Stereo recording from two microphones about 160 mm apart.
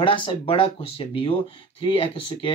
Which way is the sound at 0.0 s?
30° left (ahead or behind).